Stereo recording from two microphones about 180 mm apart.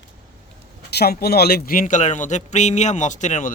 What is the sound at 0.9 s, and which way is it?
A man's voice, 65° left (ahead or behind).